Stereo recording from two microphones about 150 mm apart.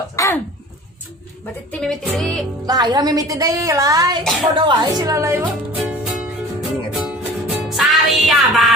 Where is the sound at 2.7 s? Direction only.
25° right (ahead or behind).